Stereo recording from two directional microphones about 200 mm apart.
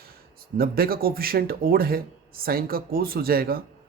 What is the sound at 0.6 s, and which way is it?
Speech, 50° right (ahead or behind).